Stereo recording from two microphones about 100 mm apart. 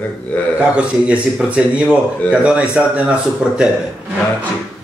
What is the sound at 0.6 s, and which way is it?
Speech, 15° right (ahead or behind).